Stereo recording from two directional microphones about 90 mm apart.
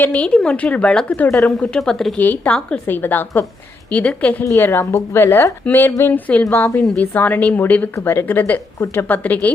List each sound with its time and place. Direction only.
0.0 s a woman's voice: 15° left (ahead or behind)
1.3 s a woman's voice: 5° left (ahead or behind)
2.1 s a woman's voice: 20° left (ahead or behind)
2.8 s a woman's voice: 25° left (ahead or behind)
4.6 s a woman's voice: 25° left (ahead or behind)